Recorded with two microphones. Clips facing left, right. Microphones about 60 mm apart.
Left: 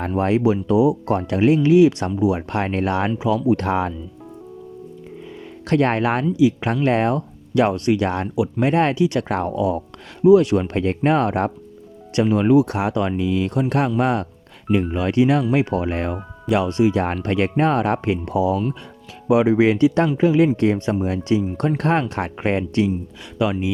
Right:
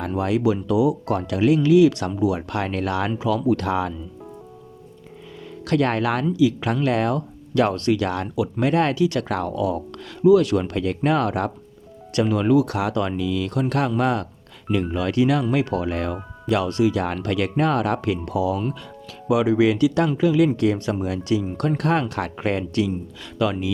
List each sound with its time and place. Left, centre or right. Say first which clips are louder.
0.2 s speech: left 3 dB; left
5.6 s speech: left 2 dB; left